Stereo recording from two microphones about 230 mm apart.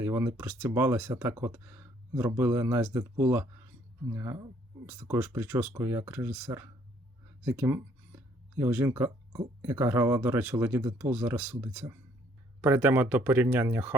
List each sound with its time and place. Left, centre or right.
0.0 s speech: centre